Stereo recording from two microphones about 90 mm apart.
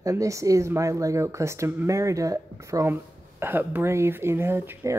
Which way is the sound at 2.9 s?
25° right (ahead or behind).